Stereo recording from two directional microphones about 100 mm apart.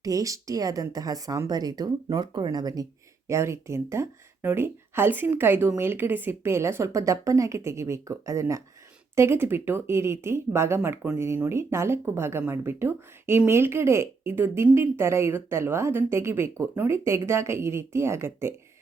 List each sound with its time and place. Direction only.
0.0 s speech: 35° right (ahead or behind)
3.2 s speech: 30° right (ahead or behind)
11.4 s speech: 25° right (ahead or behind)